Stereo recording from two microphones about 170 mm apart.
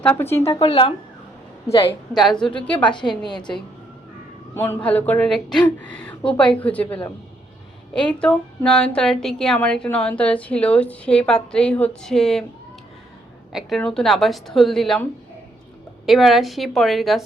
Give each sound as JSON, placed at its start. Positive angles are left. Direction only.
{"t": 0.0, "sound": "speech", "side_deg": 10}
{"t": 0.6, "sound": "speech", "side_deg": 35}
{"t": 2.1, "sound": "speech", "side_deg": 0}
{"t": 2.9, "sound": "a woman's voice", "side_deg": 25}
{"t": 4.5, "sound": "speech", "side_deg": 15}
{"t": 8.2, "sound": "speech", "side_deg": 5}
{"t": 13.5, "sound": "speech", "side_deg": 0}
{"t": 16.0, "sound": "speech", "side_deg": 0}